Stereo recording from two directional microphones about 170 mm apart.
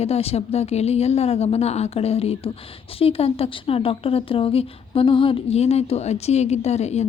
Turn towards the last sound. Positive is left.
turn(degrees=40)  # may be behind; listen again after turning